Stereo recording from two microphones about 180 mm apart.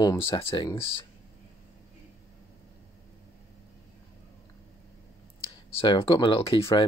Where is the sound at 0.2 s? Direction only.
30° left (ahead or behind).